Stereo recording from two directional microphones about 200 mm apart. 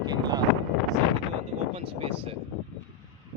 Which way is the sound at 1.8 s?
30° right (ahead or behind).